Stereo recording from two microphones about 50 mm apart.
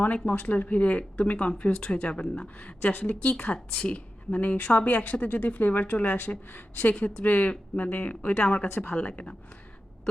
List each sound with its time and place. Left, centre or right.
0.0 s a woman's voice: left
2.2 s speech: centre
2.6 s a woman's voice: left
7.0 s a woman's voice: left
8.6 s speech: left
8.9 s a woman's voice: left